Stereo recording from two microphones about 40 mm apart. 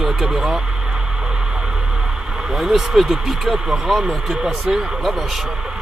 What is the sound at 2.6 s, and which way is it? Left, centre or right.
Speech, centre.